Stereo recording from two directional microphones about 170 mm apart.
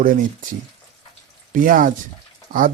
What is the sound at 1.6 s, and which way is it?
Speech, 50° right (ahead or behind).